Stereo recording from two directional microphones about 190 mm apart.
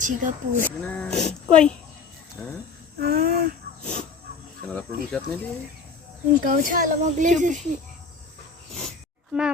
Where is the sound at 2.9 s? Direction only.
55° right (ahead or behind).